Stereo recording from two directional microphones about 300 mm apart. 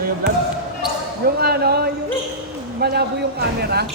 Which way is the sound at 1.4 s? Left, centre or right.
Right.